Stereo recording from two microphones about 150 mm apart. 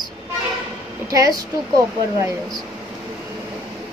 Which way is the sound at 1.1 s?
25° right (ahead or behind).